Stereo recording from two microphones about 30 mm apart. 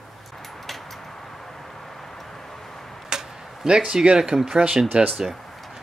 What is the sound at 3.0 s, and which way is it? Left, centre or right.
Arrow, right.